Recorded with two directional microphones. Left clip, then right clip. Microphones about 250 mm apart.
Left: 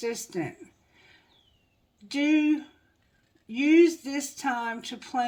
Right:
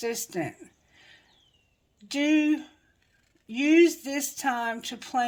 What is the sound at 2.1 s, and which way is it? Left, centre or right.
Speech, right.